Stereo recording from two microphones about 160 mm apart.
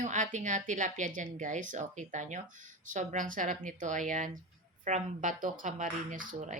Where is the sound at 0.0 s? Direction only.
50° right (ahead or behind).